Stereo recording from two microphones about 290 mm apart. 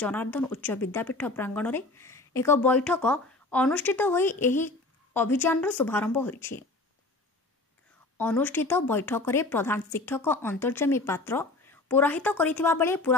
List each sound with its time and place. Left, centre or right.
0.0 s a woman's voice: centre
8.2 s a woman's voice: centre